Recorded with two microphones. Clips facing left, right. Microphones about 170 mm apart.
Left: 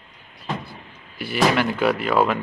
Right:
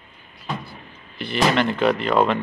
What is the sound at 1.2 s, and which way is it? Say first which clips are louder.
Speech: even; 5° left (ahead or behind).